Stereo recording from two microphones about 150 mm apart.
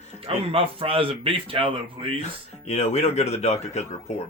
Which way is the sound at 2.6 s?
45° left (ahead or behind).